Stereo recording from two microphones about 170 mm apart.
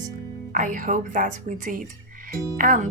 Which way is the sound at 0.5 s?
50° right (ahead or behind).